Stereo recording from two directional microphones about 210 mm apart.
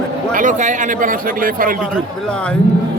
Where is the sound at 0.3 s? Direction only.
35° right (ahead or behind).